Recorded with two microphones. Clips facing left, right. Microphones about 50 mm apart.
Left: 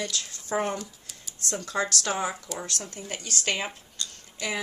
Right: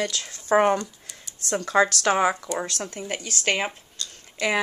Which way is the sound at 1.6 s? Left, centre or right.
Right.